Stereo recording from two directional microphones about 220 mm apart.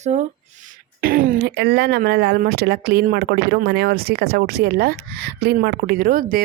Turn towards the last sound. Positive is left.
turn(degrees=-40)  # may be behind; listen again after turning